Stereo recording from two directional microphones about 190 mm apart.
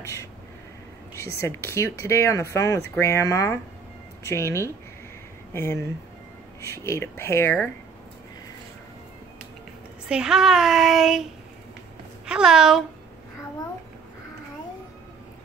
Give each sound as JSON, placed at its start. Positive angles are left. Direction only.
{"t": 0.0, "sound": "a sound", "side_deg": 15}
{"t": 1.4, "sound": "speech", "side_deg": 15}
{"t": 10.0, "sound": "speech", "side_deg": -5}
{"t": 12.3, "sound": "speech", "side_deg": -5}